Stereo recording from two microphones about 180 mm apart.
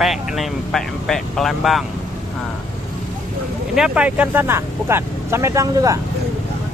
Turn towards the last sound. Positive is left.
turn(degrees=-20)  # may be behind; listen again after turning